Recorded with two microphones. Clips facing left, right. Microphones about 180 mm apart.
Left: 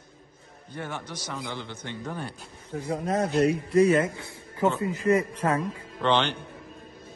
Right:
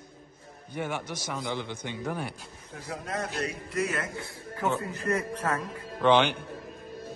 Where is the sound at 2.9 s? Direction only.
35° left (ahead or behind).